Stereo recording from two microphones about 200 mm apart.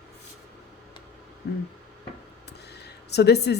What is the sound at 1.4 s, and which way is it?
Speech, 55° left (ahead or behind).